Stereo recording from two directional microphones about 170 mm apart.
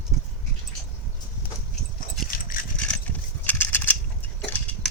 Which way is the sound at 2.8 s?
10° left (ahead or behind).